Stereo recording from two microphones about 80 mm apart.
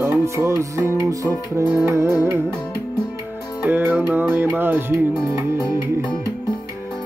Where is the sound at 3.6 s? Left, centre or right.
Right.